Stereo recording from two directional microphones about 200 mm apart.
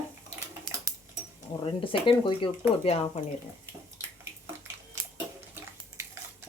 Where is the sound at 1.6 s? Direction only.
25° left (ahead or behind).